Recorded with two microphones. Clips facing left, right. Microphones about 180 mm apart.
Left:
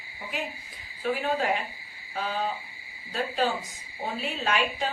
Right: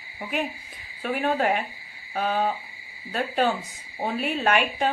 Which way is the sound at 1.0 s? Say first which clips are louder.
Right 3 dB; 55° right (ahead or behind).